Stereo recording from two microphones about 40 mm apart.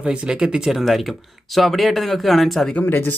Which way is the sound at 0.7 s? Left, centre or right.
Centre.